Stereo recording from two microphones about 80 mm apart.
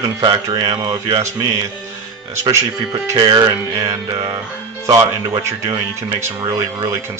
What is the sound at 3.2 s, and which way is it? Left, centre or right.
A man's voice, right.